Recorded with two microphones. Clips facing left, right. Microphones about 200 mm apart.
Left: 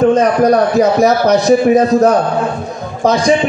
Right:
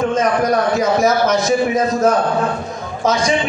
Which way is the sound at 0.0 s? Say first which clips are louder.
Left 6 dB; 35° left (ahead or behind).